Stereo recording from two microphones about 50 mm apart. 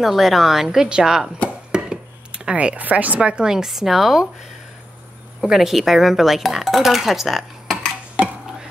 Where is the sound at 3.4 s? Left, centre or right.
Centre.